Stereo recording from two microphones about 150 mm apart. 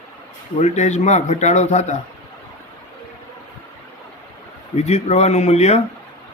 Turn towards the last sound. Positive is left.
turn(degrees=45)  # may be behind; listen again after turning